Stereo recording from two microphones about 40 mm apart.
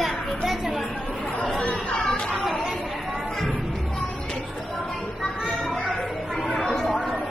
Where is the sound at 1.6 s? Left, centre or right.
Left.